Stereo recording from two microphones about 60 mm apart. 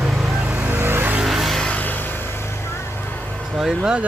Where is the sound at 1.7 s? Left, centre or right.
Left.